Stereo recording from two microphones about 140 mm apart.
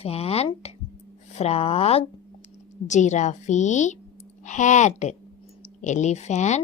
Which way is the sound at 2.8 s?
60° left (ahead or behind).